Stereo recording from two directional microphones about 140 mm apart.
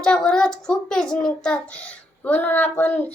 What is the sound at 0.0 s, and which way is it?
A child's voice, 5° left (ahead or behind).